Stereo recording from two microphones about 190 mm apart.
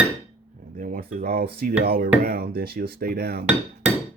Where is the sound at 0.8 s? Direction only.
45° right (ahead or behind).